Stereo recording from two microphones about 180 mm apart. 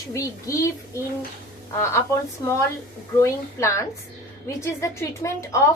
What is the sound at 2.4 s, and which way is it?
A woman's voice, 20° left (ahead or behind).